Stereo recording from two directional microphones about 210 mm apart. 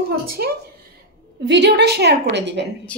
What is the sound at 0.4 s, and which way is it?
A woman's voice, 50° right (ahead or behind).